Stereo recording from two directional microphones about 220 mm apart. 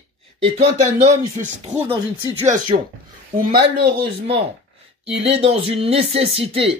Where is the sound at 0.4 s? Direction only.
25° right (ahead or behind).